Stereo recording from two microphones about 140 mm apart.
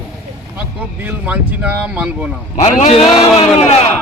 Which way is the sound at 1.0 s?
10° right (ahead or behind).